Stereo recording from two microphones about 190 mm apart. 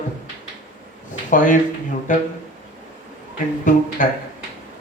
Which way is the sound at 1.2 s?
45° left (ahead or behind).